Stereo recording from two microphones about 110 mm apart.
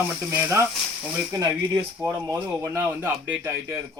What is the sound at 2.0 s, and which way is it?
Speech, 25° right (ahead or behind).